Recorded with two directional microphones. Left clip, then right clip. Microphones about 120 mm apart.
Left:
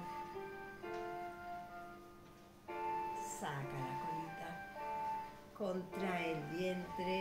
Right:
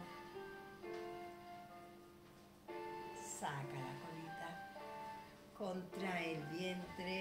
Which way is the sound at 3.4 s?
Centre (ahead or behind).